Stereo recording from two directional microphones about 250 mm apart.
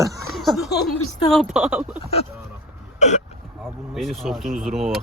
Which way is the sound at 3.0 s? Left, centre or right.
Left.